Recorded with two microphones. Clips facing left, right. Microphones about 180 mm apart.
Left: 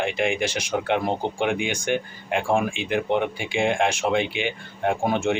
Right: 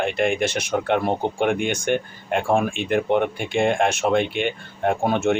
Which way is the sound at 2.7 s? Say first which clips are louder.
Right 3 dB; 55° right (ahead or behind).